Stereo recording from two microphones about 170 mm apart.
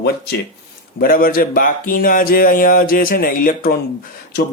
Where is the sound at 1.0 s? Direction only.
60° left (ahead or behind).